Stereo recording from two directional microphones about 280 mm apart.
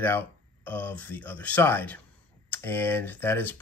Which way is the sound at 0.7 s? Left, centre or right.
Centre.